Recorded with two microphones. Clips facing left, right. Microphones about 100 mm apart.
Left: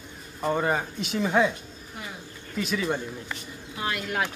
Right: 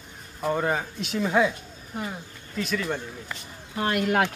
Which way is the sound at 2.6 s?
Centre (ahead or behind).